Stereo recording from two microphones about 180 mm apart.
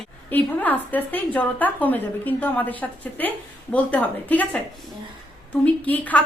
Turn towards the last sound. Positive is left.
turn(degrees=10)  # may be behind; listen again after turning